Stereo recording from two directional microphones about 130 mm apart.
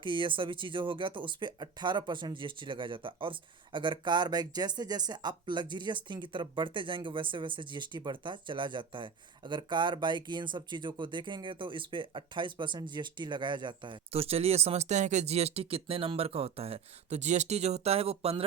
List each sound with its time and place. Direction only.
0.0 s speech: 40° right (ahead or behind)